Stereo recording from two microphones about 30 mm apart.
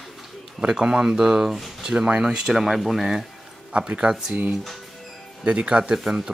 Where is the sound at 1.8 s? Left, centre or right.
Centre.